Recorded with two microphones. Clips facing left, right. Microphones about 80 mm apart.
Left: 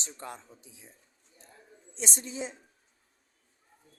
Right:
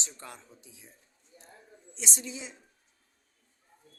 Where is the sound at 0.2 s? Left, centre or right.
Left.